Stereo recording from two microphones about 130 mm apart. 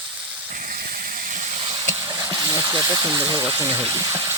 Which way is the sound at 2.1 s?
25° right (ahead or behind).